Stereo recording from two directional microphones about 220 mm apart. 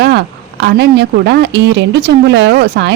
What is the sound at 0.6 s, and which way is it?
Speech, 50° right (ahead or behind).